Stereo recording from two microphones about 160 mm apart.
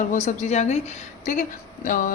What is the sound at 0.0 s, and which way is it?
Speech, 50° left (ahead or behind).